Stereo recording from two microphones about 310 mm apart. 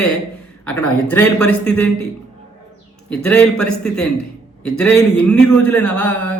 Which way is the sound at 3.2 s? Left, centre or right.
Centre.